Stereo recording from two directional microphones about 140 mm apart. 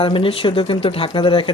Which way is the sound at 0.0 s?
40° left (ahead or behind).